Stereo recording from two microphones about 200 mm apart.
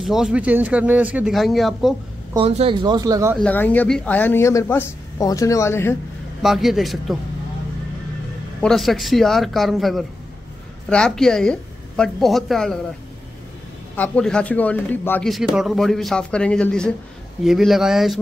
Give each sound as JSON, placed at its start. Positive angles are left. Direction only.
{"t": 0.0, "sound": "a man's voice", "side_deg": 0}
{"t": 2.3, "sound": "speech", "side_deg": -30}
{"t": 3.3, "sound": "a man's voice", "side_deg": 10}
{"t": 6.4, "sound": "a man's voice", "side_deg": 0}
{"t": 8.5, "sound": "a man's voice", "side_deg": 0}
{"t": 13.9, "sound": "a man's voice", "side_deg": 5}